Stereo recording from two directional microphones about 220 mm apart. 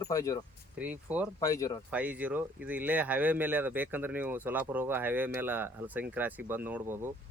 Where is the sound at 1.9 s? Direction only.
5° right (ahead or behind).